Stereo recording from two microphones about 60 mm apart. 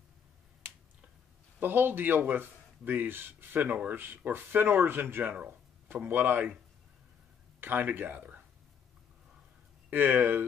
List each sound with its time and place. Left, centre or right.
1.6 s speech: right
7.6 s speech: right
9.8 s speech: right